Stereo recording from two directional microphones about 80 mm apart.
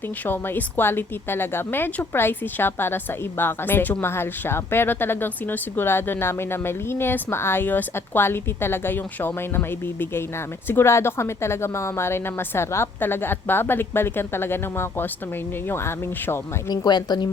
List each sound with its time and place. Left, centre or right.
0.3 s a woman's voice: left
16.6 s speech: left